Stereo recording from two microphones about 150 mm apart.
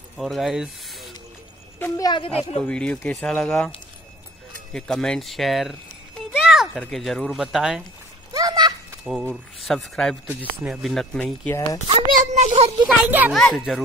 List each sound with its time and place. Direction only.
0.2 s speech: centre (ahead or behind)
1.8 s a woman's voice: 25° left (ahead or behind)
2.6 s speech: 5° left (ahead or behind)
4.7 s a sound: 5° left (ahead or behind)
6.8 s speech: centre (ahead or behind)
8.3 s a sound: 25° right (ahead or behind)
9.0 s speech: centre (ahead or behind)
11.9 s a sound: 45° right (ahead or behind)
12.8 s speech: 10° right (ahead or behind)
13.3 s speech: centre (ahead or behind)